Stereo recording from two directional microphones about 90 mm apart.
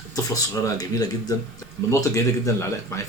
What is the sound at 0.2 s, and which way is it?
Speech, 40° left (ahead or behind).